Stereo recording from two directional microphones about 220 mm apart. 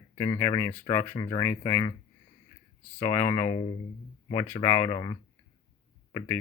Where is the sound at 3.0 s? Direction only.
15° left (ahead or behind).